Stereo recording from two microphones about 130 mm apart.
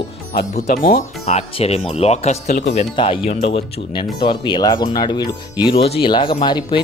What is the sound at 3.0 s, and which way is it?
Speech, 45° left (ahead or behind).